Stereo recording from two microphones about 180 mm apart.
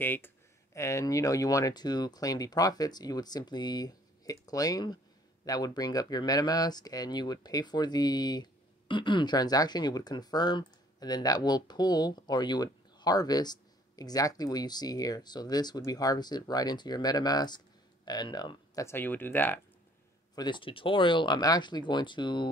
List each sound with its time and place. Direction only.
0.0 s speech: 10° left (ahead or behind)
20.3 s speech: 25° left (ahead or behind)